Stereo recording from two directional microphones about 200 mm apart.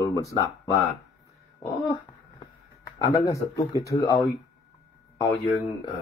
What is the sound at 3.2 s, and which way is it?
Speech, 15° left (ahead or behind).